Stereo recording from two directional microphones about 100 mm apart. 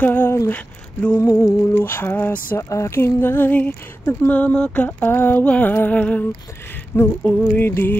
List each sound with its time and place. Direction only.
0.0 s a sound: 20° left (ahead or behind)
0.5 s speech: 15° left (ahead or behind)
1.2 s speech: 25° left (ahead or behind)